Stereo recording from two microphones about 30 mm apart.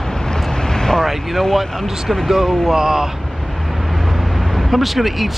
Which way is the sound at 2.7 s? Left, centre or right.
Centre.